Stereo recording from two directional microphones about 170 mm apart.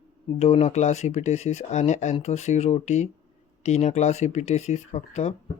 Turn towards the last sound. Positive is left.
turn(degrees=45)  # may be behind; listen again after turning